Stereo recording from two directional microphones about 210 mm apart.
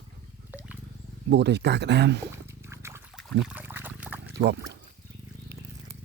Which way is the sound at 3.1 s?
Centre (ahead or behind).